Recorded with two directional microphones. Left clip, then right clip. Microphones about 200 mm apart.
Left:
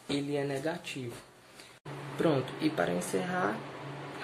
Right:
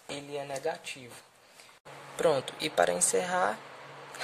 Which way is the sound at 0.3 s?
40° right (ahead or behind).